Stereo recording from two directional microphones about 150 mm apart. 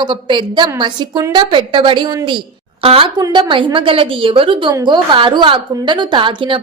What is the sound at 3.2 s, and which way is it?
A woman's voice, 25° right (ahead or behind).